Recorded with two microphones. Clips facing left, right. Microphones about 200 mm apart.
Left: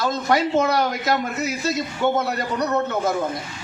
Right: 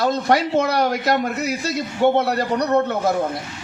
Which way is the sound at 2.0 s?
30° right (ahead or behind).